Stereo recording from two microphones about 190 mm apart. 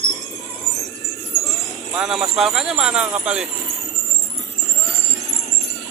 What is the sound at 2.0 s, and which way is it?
Speech, centre (ahead or behind).